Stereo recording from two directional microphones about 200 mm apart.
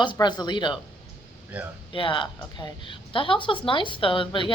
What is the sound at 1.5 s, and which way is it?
Speech, 5° right (ahead or behind).